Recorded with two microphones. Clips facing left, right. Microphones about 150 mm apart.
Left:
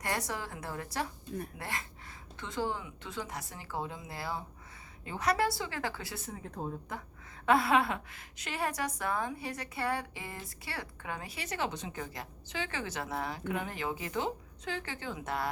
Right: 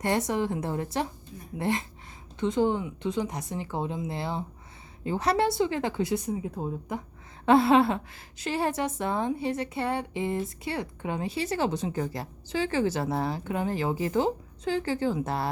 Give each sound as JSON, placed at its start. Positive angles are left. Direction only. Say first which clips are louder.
{"t": 0.0, "sound": "speech", "louder": "right 10 dB", "side_deg": -25}
{"t": 7.4, "sound": "a woman's voice", "louder": "right 7 dB", "side_deg": -30}